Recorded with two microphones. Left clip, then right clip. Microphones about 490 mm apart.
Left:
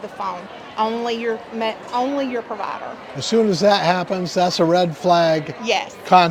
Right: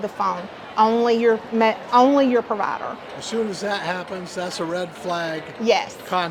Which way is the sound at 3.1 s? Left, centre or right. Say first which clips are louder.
Left 9 dB; left.